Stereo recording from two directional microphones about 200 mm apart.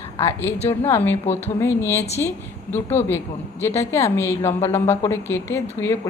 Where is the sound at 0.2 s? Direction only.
10° left (ahead or behind).